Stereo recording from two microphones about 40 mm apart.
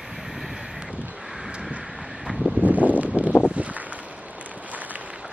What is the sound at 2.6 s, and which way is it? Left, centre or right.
Wind, right.